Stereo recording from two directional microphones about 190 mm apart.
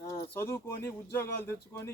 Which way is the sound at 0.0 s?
15° left (ahead or behind).